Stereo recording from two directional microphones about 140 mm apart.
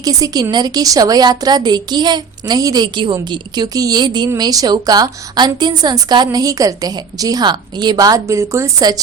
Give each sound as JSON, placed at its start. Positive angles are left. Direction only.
{"t": 0.0, "sound": "a woman's voice", "side_deg": -25}